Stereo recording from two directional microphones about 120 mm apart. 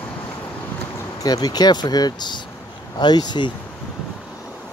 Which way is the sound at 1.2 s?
35° left (ahead or behind).